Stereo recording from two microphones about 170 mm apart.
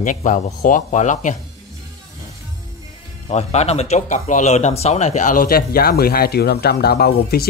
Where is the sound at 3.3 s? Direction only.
40° left (ahead or behind).